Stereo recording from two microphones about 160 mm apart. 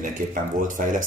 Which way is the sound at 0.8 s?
55° right (ahead or behind).